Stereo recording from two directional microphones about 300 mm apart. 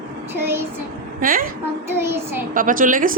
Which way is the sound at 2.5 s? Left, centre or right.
Right.